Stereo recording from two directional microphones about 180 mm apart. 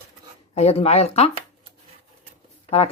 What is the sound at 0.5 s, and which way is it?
Speech, 35° left (ahead or behind).